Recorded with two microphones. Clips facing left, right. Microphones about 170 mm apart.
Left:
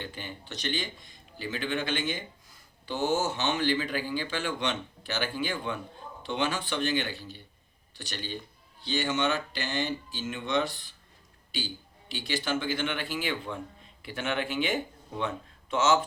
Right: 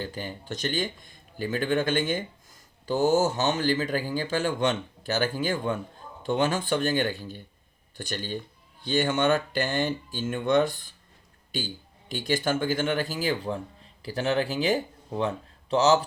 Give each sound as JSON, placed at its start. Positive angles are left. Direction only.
{"t": 0.0, "sound": "speech", "side_deg": -40}